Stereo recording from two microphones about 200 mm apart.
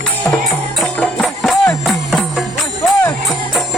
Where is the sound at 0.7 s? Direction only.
Centre (ahead or behind).